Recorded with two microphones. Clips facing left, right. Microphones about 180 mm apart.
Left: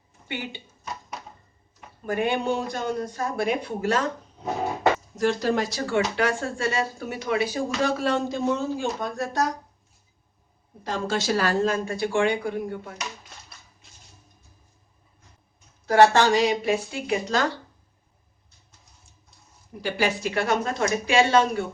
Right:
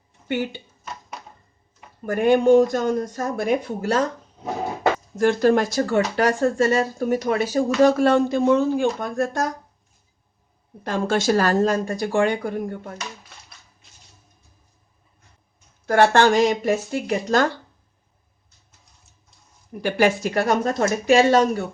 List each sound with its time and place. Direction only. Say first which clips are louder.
0.3 s speech: right 9 dB; 45° right (ahead or behind)
2.0 s speech: right 9 dB; 45° right (ahead or behind)
5.1 s speech: right 6 dB; 55° right (ahead or behind)
10.8 s speech: right 5 dB; 55° right (ahead or behind)
15.9 s speech: right 1 dB; 55° right (ahead or behind)
19.8 s speech: right 6 dB; 50° right (ahead or behind)